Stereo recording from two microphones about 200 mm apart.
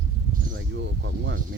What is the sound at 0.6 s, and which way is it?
Speech, 65° right (ahead or behind).